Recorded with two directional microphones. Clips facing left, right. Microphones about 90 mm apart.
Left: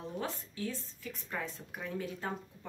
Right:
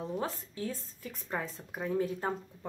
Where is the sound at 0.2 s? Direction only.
35° right (ahead or behind).